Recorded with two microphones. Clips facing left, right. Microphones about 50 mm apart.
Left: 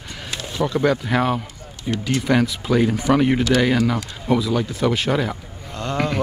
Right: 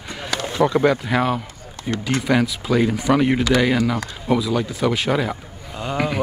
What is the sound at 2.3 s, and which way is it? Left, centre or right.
Speech, centre.